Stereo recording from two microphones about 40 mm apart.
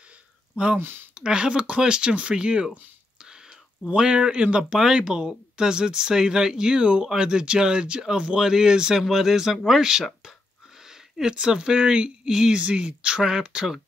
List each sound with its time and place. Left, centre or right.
0.7 s speech: right
1.1 s speech: right
3.2 s whispering: centre
3.9 s speech: right